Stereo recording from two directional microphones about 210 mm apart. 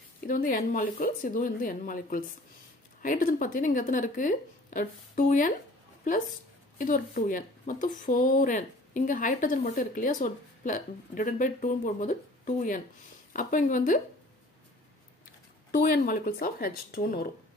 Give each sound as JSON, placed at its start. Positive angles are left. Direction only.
{"t": 0.3, "sound": "speech", "side_deg": 40}
{"t": 6.8, "sound": "speech", "side_deg": 40}
{"t": 15.7, "sound": "speech", "side_deg": 45}